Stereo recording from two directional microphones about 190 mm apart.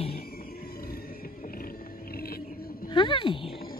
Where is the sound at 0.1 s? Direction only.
50° left (ahead or behind).